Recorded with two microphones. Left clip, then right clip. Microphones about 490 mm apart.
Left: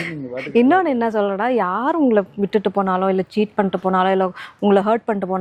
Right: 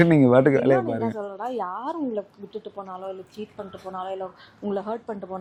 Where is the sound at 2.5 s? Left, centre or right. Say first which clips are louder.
Left 17 dB; left.